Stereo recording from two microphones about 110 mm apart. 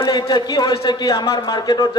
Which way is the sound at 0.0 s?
40° left (ahead or behind).